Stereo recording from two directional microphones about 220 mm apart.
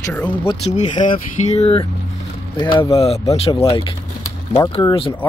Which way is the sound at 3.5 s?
15° left (ahead or behind).